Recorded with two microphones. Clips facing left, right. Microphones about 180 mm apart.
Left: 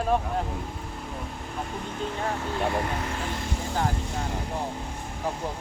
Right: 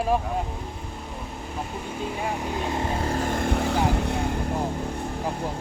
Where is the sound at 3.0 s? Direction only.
40° right (ahead or behind); by 4.3 s 65° right (ahead or behind).